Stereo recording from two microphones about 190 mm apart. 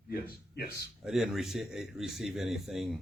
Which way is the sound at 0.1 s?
50° left (ahead or behind).